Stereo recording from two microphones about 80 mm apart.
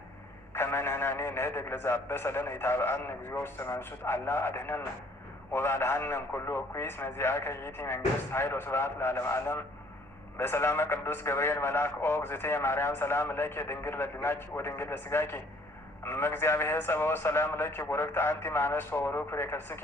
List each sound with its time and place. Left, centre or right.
0.5 s a man's voice: left